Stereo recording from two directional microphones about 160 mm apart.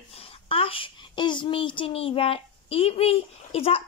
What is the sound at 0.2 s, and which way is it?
A child's voice, 35° left (ahead or behind).